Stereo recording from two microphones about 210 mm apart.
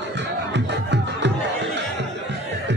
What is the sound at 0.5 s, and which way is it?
Music, 55° right (ahead or behind).